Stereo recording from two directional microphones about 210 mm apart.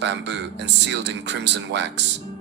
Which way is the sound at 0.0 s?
55° right (ahead or behind).